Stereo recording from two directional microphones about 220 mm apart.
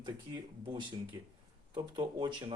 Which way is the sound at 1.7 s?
20° right (ahead or behind).